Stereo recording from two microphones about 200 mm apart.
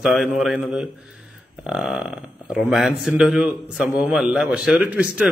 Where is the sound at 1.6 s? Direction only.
5° right (ahead or behind).